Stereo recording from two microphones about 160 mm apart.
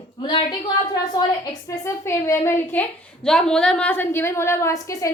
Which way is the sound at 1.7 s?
20° left (ahead or behind).